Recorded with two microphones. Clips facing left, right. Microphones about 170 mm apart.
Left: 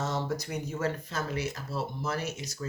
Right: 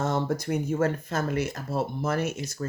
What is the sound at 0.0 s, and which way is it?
Speech, 55° right (ahead or behind).